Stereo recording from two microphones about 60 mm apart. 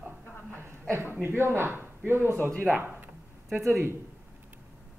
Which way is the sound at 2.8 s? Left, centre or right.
Right.